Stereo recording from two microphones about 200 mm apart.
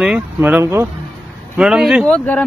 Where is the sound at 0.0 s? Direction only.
5° right (ahead or behind).